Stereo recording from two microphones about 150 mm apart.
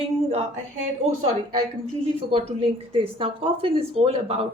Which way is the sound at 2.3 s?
40° right (ahead or behind).